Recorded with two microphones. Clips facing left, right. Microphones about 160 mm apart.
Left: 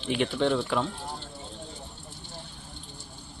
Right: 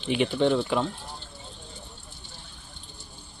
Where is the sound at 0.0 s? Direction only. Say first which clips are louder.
Right 3 dB; centre (ahead or behind).